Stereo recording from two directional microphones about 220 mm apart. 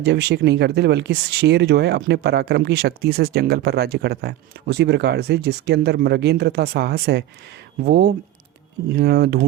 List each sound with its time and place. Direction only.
0.0 s speech: 50° right (ahead or behind)